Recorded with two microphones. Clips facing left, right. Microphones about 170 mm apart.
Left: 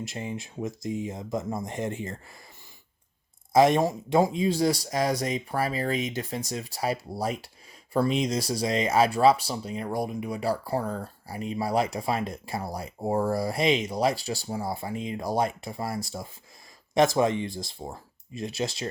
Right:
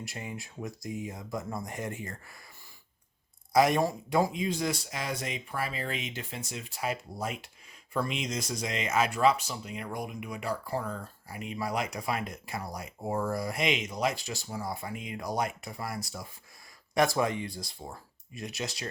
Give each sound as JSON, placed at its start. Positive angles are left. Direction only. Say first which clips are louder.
{"t": 0.0, "sound": "speech", "louder": "left 6 dB", "side_deg": 25}
{"t": 3.5, "sound": "speech", "louder": "left 4 dB", "side_deg": 25}